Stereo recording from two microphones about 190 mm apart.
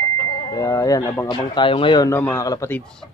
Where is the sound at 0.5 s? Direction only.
15° left (ahead or behind).